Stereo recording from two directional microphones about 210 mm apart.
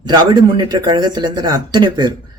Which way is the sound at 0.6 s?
20° right (ahead or behind).